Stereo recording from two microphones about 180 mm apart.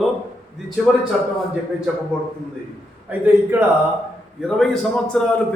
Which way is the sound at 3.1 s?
10° right (ahead or behind).